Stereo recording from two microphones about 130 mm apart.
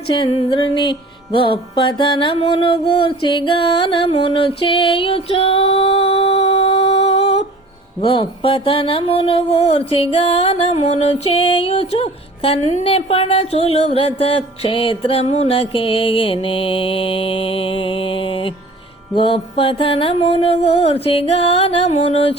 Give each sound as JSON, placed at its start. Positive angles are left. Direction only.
{"t": 0.1, "sound": "mantra", "side_deg": 45}